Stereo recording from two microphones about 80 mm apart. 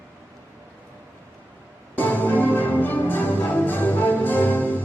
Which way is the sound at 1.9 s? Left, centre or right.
Left.